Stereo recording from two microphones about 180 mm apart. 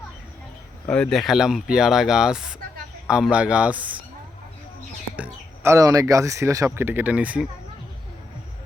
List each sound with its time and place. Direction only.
0.9 s speech: 5° left (ahead or behind)
5.1 s speech: 10° right (ahead or behind)